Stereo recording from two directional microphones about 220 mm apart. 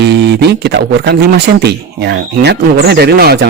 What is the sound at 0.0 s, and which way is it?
Speech, 50° right (ahead or behind).